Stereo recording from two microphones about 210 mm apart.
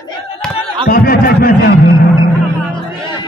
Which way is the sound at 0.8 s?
45° left (ahead or behind).